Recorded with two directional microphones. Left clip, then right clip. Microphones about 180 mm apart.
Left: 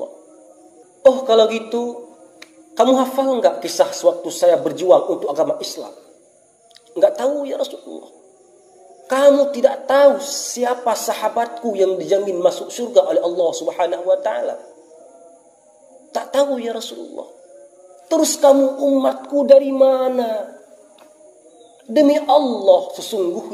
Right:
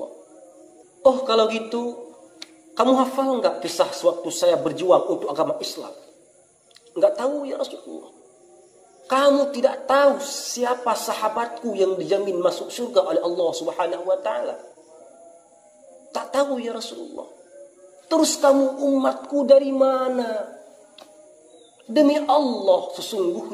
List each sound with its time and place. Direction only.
1.0 s a woman's voice: 20° right (ahead or behind)
7.1 s a woman's voice: 15° right (ahead or behind)
9.1 s a woman's voice: 20° right (ahead or behind)
16.1 s a man's voice: 15° right (ahead or behind)
18.1 s a woman's voice: 15° right (ahead or behind)
22.1 s a woman's voice: 15° right (ahead or behind)